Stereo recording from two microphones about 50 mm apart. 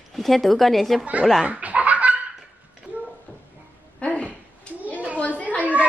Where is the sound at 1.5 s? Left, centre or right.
Right.